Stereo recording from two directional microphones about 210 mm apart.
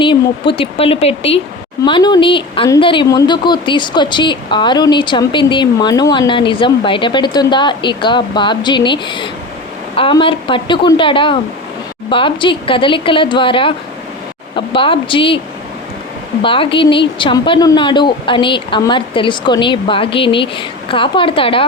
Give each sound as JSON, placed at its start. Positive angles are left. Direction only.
{"t": 0.0, "sound": "speech", "side_deg": 25}
{"t": 16.4, "sound": "speech", "side_deg": 25}